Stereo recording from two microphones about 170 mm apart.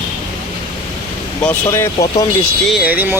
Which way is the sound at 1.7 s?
20° left (ahead or behind).